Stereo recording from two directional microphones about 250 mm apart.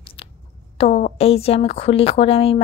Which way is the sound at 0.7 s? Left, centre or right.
Left.